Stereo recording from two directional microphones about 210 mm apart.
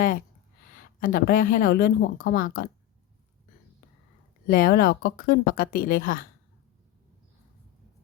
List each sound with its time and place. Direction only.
0.9 s speech: 40° left (ahead or behind)
4.5 s speech: 45° left (ahead or behind)